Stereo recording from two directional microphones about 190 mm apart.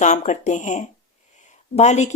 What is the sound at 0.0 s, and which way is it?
Speech, 40° left (ahead or behind).